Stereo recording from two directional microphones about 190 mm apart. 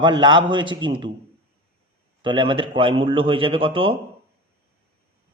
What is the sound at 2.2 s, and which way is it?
A man's voice, 25° right (ahead or behind).